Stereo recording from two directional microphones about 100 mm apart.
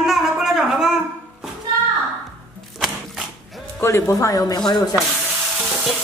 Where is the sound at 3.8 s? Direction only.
30° left (ahead or behind).